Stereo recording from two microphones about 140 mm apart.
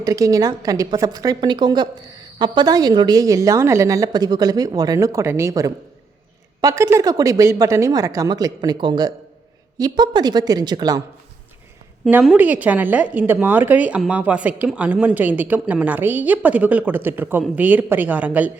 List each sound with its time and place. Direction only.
0.0 s a woman's voice: 25° right (ahead or behind)
12.2 s a woman's voice: 10° right (ahead or behind)